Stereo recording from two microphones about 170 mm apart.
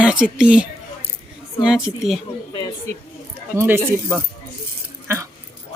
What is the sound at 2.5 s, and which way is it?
Speech, 25° left (ahead or behind).